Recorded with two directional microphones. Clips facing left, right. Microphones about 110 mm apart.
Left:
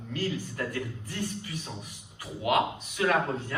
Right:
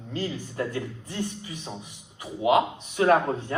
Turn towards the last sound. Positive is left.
turn(degrees=-35)  # may be behind; listen again after turning